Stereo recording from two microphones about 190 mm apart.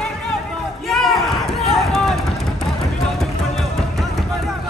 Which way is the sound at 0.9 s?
Centre (ahead or behind).